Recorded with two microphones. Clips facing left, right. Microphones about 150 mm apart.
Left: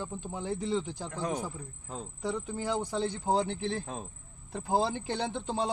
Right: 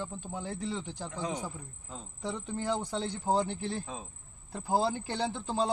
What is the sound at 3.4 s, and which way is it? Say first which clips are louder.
Speech: left 2 dB; 10° right (ahead or behind).